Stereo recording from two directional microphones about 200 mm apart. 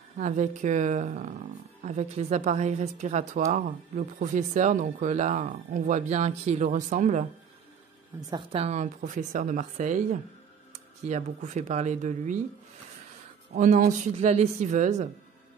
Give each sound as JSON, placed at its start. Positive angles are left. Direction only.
{"t": 0.2, "sound": "a woman's voice", "side_deg": -40}
{"t": 8.2, "sound": "a woman's voice", "side_deg": -20}
{"t": 13.6, "sound": "a woman's voice", "side_deg": -40}